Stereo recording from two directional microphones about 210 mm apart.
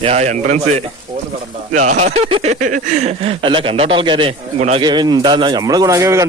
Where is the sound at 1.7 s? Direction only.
35° right (ahead or behind).